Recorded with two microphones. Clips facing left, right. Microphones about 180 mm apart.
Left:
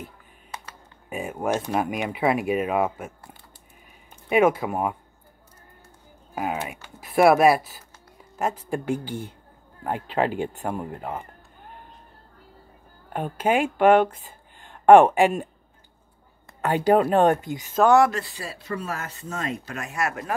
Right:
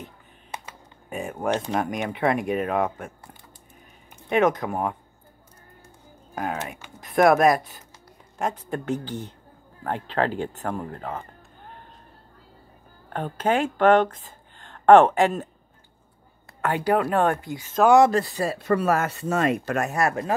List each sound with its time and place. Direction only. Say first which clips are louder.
1.1 s speech: even; 5° left (ahead or behind)
4.3 s speech: left 2 dB; 10° left (ahead or behind)
6.3 s speech: left 1 dB; 5° left (ahead or behind)
13.1 s speech: left 1 dB; 10° left (ahead or behind)
16.6 s speech: left 3 dB; 20° left (ahead or behind)
17.8 s speech: right 2 dB; 20° right (ahead or behind)
18.1 s speech: right 8 dB; 45° right (ahead or behind)
19.9 s speech: even; 35° right (ahead or behind)